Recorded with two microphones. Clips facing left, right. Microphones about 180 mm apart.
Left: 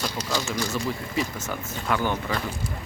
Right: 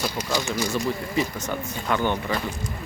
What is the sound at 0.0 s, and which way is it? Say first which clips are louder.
Speech: right 2 dB; 10° right (ahead or behind).